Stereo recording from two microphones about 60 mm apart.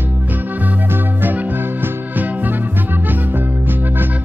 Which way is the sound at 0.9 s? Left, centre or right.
Right.